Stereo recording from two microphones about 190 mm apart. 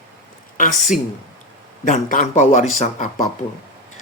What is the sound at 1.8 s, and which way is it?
Speech, 45° left (ahead or behind).